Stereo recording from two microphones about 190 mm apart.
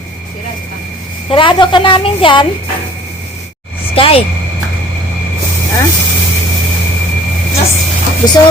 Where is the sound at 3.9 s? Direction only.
30° left (ahead or behind).